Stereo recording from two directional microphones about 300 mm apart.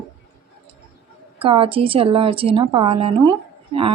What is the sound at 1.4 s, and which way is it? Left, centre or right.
A woman's voice, centre.